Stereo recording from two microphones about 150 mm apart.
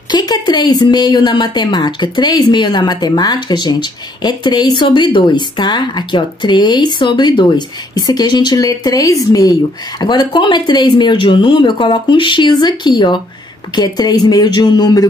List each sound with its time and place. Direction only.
0.1 s a woman's voice: 25° left (ahead or behind)